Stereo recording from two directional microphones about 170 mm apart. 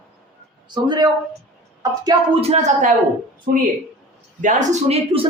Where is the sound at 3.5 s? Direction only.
55° right (ahead or behind); by 5.3 s 35° right (ahead or behind).